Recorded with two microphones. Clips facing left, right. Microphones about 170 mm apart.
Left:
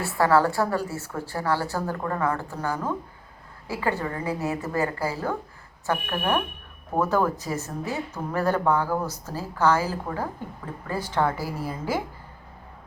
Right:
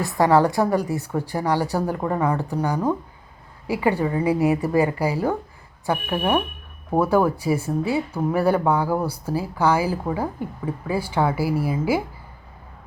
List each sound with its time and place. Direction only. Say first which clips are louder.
0.0 s speech: right 3 dB; 15° right (ahead or behind)